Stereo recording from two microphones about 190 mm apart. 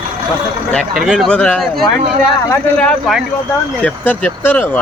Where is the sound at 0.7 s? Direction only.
Centre (ahead or behind).